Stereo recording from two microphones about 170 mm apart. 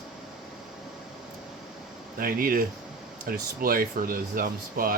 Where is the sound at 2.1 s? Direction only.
55° right (ahead or behind).